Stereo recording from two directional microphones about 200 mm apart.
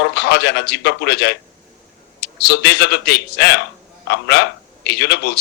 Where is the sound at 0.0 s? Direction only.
55° left (ahead or behind).